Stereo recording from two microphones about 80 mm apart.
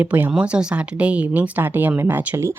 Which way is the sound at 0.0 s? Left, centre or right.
Right.